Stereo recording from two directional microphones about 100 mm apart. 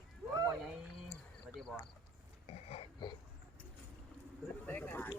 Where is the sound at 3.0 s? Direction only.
50° left (ahead or behind).